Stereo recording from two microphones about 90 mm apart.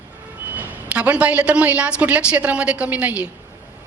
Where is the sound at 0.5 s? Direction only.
15° right (ahead or behind).